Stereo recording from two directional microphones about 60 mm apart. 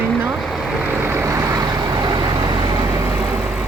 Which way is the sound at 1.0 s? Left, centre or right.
Right.